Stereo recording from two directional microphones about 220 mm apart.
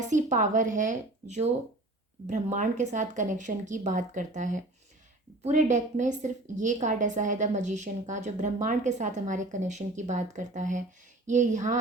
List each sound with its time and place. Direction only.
0.1 s a woman's voice: 35° right (ahead or behind)